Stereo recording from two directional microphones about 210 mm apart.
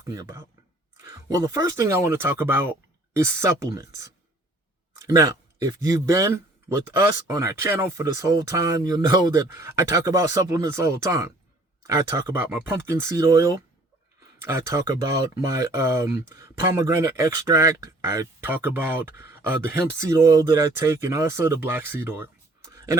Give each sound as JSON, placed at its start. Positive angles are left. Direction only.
{"t": 0.1, "sound": "speech", "side_deg": -15}